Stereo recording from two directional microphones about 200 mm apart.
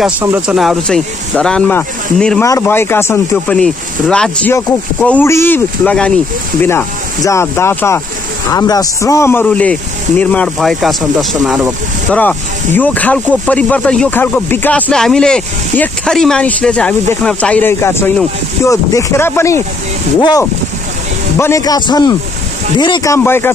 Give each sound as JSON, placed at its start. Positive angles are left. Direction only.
{"t": 0.2, "sound": "speech", "side_deg": -10}
{"t": 12.1, "sound": "a man's voice", "side_deg": 10}